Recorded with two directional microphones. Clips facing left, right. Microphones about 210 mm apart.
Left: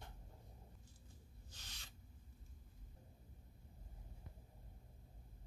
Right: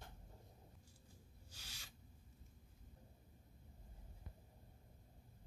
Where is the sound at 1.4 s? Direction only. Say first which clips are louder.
Even; 10° right (ahead or behind).